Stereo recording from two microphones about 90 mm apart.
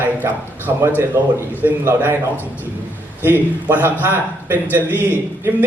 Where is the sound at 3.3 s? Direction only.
20° right (ahead or behind).